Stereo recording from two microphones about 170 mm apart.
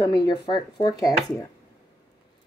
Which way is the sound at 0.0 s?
25° left (ahead or behind).